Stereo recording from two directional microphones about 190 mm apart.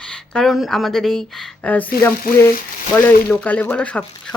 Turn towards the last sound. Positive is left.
turn(degrees=5)  # may be behind; listen again after turning